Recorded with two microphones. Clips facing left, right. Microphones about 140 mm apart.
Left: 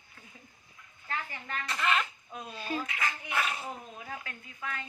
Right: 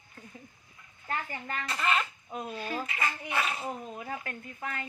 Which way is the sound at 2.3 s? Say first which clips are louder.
Right 5 dB; 50° right (ahead or behind).